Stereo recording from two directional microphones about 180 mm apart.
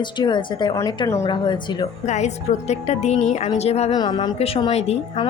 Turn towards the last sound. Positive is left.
turn(degrees=35)  # may be behind; listen again after turning